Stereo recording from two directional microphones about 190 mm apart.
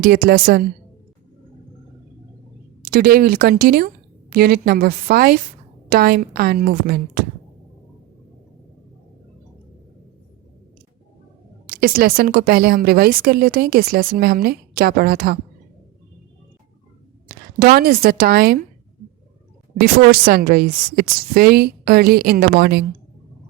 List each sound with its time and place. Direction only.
0.0 s speech: 50° right (ahead or behind)
2.9 s speech: 50° right (ahead or behind)
11.7 s speech: 50° right (ahead or behind)
17.2 s speech: 50° right (ahead or behind)
19.8 s speech: 50° right (ahead or behind)